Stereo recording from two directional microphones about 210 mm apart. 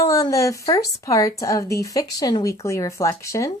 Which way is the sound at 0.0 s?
15° left (ahead or behind).